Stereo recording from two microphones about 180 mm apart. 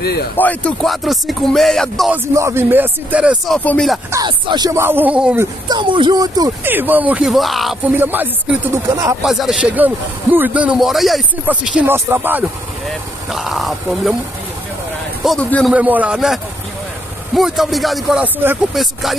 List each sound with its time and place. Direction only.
0.0 s a man's voice: 60° left (ahead or behind)
0.4 s music: 5° left (ahead or behind)
2.3 s a man's voice: 15° right (ahead or behind); by 4.0 s 5° left (ahead or behind)
4.1 s a man's voice: 20° right (ahead or behind)
5.7 s speech: 25° right (ahead or behind)
6.7 s music: 10° right (ahead or behind)
7.9 s a man's voice: 10° right (ahead or behind)
9.2 s a man's voice: centre (ahead or behind)
15.2 s music: 5° left (ahead or behind)
15.7 s a man's voice: 10° right (ahead or behind)
17.3 s music: centre (ahead or behind)